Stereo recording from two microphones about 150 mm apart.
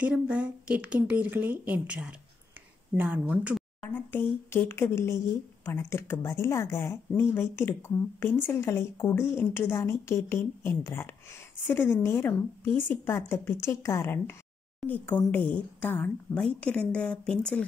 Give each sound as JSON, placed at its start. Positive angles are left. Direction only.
{"t": 0.0, "sound": "a woman's voice", "side_deg": -10}
{"t": 3.8, "sound": "speech", "side_deg": 15}